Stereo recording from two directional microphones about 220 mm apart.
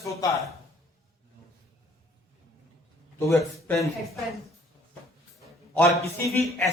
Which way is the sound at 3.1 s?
10° left (ahead or behind).